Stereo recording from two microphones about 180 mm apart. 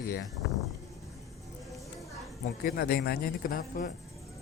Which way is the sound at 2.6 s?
55° left (ahead or behind).